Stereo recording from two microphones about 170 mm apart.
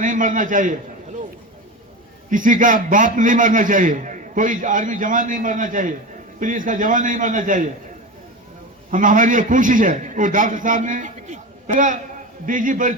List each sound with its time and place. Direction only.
0.0 s a man's voice: 50° right (ahead or behind)
2.3 s a man's voice: 50° right (ahead or behind)
8.9 s a man's voice: 50° right (ahead or behind)